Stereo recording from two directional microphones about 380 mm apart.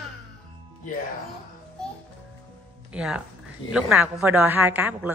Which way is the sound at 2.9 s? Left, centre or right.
Centre.